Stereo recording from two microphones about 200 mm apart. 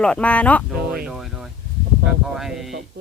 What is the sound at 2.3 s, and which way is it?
Speech, centre (ahead or behind).